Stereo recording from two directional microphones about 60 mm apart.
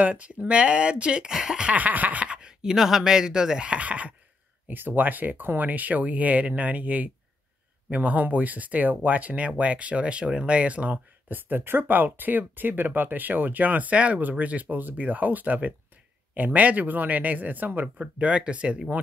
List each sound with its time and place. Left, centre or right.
0.0 s speech: right
1.7 s speech: right
4.6 s speech: right
18.0 s speech: centre